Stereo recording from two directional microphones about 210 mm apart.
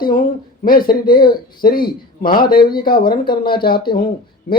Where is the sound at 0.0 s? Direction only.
45° left (ahead or behind).